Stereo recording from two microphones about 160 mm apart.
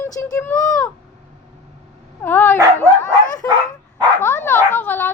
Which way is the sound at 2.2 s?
15° left (ahead or behind).